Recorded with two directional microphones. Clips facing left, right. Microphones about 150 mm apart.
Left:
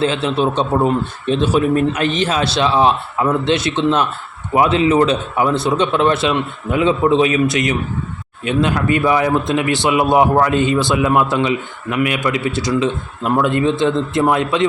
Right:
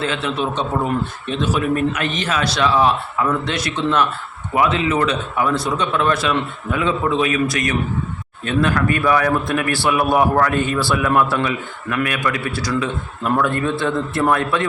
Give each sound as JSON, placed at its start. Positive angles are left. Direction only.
{"t": 0.0, "sound": "a man's voice", "side_deg": 30}